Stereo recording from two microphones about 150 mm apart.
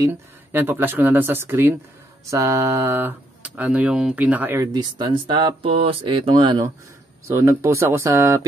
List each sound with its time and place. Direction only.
0.0 s speech: 15° right (ahead or behind)
4.7 s speech: 30° right (ahead or behind)
7.2 s speech: 20° right (ahead or behind)